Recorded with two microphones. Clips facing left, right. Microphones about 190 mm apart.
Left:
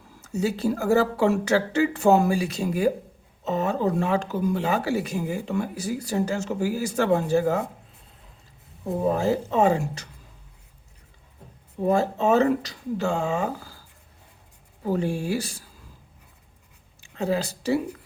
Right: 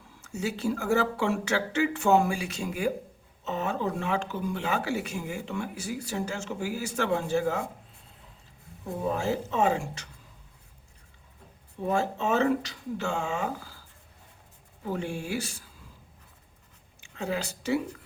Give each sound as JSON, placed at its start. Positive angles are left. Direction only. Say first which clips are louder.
{"t": 0.2, "sound": "speech", "louder": "left 6 dB", "side_deg": 35}
{"t": 9.0, "sound": "speech", "louder": "left 5 dB", "side_deg": 40}
{"t": 11.8, "sound": "speech", "louder": "left 6 dB", "side_deg": 40}
{"t": 14.8, "sound": "speech", "louder": "left 7 dB", "side_deg": 35}
{"t": 17.0, "sound": "speech", "louder": "left 6 dB", "side_deg": 35}